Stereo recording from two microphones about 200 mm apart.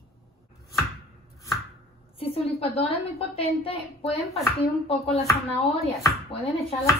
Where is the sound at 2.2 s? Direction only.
30° left (ahead or behind).